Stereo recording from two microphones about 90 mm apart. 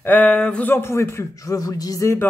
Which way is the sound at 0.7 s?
30° left (ahead or behind).